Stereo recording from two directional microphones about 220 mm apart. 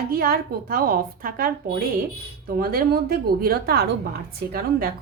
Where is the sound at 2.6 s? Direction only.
40° right (ahead or behind).